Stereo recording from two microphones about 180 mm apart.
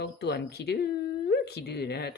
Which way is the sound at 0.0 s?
70° left (ahead or behind).